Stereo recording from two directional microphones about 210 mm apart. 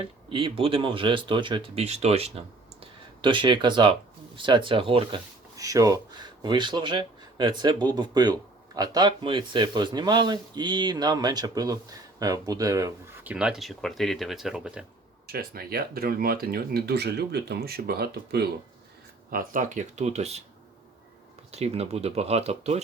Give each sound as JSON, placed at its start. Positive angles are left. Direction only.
{"t": 0.0, "sound": "speech", "side_deg": -25}
{"t": 13.3, "sound": "speech", "side_deg": -5}
{"t": 15.3, "sound": "speech", "side_deg": -45}
{"t": 21.5, "sound": "speech", "side_deg": -30}